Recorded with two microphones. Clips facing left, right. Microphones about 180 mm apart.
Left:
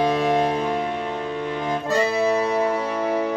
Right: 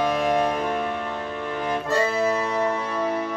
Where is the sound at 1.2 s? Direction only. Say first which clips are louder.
Left 2 dB; 20° left (ahead or behind).